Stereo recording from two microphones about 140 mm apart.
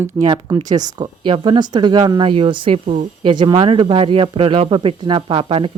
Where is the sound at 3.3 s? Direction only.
35° right (ahead or behind).